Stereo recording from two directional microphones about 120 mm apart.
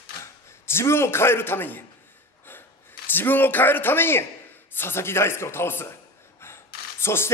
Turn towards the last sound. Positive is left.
turn(degrees=20)  # may be behind; listen again after turning